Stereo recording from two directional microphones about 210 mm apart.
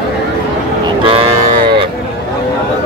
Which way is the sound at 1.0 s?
25° right (ahead or behind).